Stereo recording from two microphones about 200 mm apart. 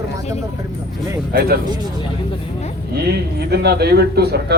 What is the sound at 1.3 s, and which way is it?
Speech, 50° right (ahead or behind).